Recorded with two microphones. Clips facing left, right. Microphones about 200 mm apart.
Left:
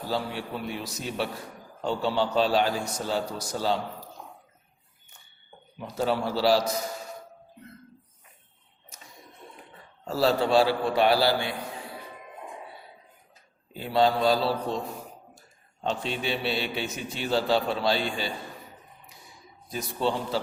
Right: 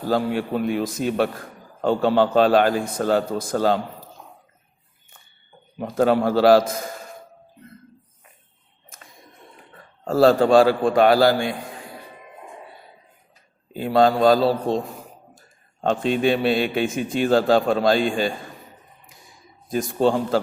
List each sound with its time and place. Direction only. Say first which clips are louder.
0.1 s a man's voice: right 10 dB; 50° right (ahead or behind)
5.8 s a man's voice: right 9 dB; 50° right (ahead or behind)
10.0 s a man's voice: right 8 dB; 50° right (ahead or behind)
13.7 s a man's voice: right 6 dB; 50° right (ahead or behind)
19.7 s a man's voice: right 8 dB; 50° right (ahead or behind)